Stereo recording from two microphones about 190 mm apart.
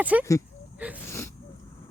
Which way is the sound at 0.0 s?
10° right (ahead or behind).